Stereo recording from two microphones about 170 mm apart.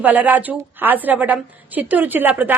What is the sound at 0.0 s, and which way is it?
A woman's voice, 10° right (ahead or behind).